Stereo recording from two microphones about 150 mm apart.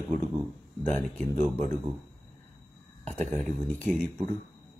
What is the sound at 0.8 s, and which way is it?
Speech, 10° left (ahead or behind).